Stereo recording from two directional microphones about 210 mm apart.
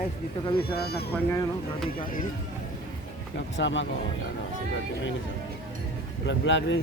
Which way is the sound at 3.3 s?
60° left (ahead or behind).